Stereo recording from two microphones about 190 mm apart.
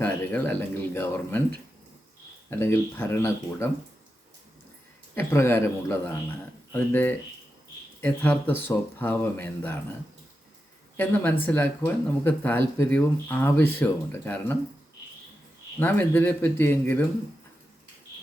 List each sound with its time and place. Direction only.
0.0 s speech: 10° left (ahead or behind)
2.5 s speech: 10° left (ahead or behind)
5.1 s speech: 15° left (ahead or behind)
10.9 s speech: 10° left (ahead or behind)
15.8 s speech: 10° left (ahead or behind)